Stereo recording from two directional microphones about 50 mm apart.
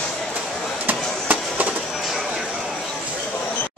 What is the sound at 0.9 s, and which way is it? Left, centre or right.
Chop, right.